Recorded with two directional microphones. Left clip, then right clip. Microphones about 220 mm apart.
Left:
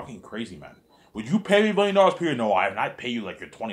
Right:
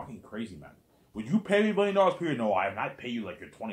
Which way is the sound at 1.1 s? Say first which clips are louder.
Left 6 dB; 30° left (ahead or behind).